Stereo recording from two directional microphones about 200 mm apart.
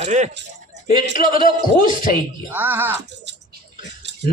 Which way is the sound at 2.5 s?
10° right (ahead or behind).